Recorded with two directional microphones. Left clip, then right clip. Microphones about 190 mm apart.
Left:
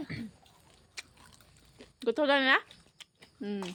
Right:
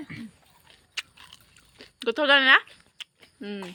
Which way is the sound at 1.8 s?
Centre (ahead or behind).